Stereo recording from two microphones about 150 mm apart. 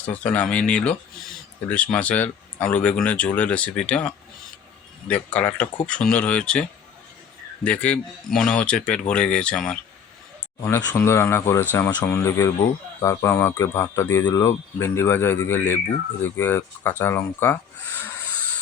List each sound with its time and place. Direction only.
0.0 s speech: 10° left (ahead or behind)
10.6 s speech: 15° left (ahead or behind)